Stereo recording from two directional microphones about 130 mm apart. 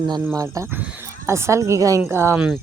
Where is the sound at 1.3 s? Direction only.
20° right (ahead or behind).